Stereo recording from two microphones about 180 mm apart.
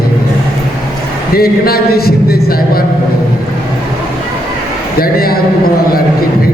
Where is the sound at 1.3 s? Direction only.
55° left (ahead or behind).